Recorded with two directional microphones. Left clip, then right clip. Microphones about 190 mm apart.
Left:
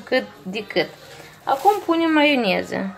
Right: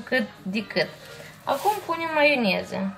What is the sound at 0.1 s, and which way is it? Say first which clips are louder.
A woman's voice: left 3 dB; 40° left (ahead or behind).